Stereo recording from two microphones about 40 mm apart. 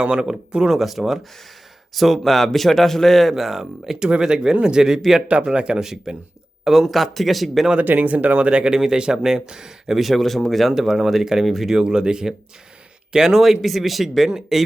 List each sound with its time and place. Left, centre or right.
0.0 s speech: right
0.8 s speech: centre
3.3 s speech: centre
5.8 s speech: centre
7.9 s speech: right
8.4 s speech: right; by 11.8 s centre
11.8 s speech: centre